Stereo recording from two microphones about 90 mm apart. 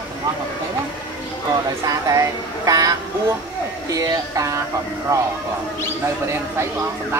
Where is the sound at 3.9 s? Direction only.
40° right (ahead or behind).